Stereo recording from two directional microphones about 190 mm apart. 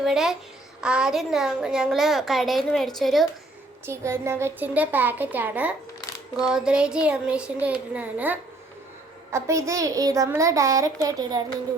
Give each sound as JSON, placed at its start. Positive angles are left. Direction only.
{"t": 0.0, "sound": "a woman's voice", "side_deg": 0}
{"t": 3.8, "sound": "a child's voice", "side_deg": -15}